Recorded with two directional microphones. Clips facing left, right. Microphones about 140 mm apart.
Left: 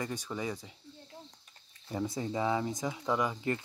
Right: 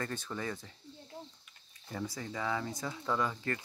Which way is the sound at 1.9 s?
20° left (ahead or behind).